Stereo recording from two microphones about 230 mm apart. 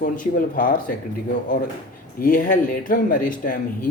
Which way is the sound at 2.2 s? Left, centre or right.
Left.